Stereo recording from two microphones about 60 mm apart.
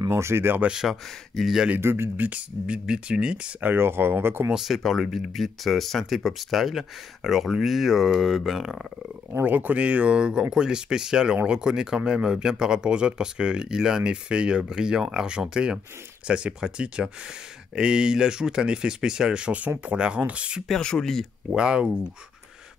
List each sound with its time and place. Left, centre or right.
0.1 s speech: right
0.7 s speech: centre
1.8 s speech: right
2.1 s speech: right
2.6 s speech: centre
3.6 s speech: right
4.6 s speech: centre
9.4 s speech: right
20.6 s speech: centre
21.5 s speech: centre